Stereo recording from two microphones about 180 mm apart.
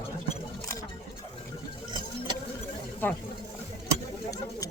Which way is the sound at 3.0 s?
10° left (ahead or behind).